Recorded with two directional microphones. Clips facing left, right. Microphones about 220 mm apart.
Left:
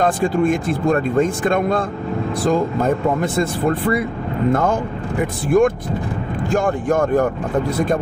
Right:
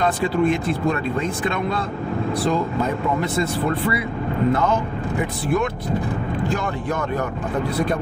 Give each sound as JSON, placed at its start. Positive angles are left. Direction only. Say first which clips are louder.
{"t": 0.0, "sound": "speech", "louder": "left 3 dB", "side_deg": 50}
{"t": 4.5, "sound": "speech", "louder": "left 4 dB", "side_deg": 50}